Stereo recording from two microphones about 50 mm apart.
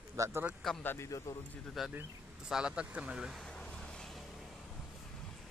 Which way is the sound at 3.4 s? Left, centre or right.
Centre.